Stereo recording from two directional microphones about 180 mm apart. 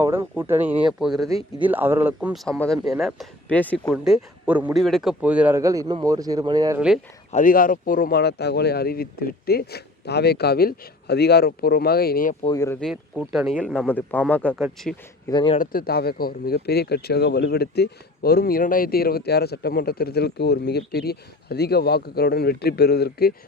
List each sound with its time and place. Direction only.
0.0 s speech: 15° right (ahead or behind)
1.6 s speech: 10° right (ahead or behind)
2.3 s speech: centre (ahead or behind)
3.9 s speech: 5° right (ahead or behind); by 6.7 s 20° right (ahead or behind)
6.7 s speech: 5° right (ahead or behind)
7.3 s speech: 45° left (ahead or behind)
12.5 s speech: 15° left (ahead or behind)
12.8 s speech: 5° right (ahead or behind)
15.3 s speech: 25° left (ahead or behind)
15.5 s speech: 50° left (ahead or behind)